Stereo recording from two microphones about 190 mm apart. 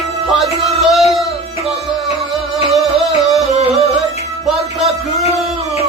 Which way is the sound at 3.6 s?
30° right (ahead or behind).